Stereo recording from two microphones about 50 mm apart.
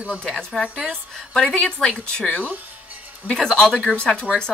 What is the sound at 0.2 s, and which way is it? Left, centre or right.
A woman's voice, centre.